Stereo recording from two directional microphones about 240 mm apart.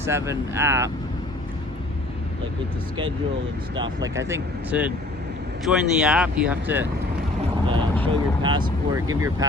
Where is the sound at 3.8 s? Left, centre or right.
Centre.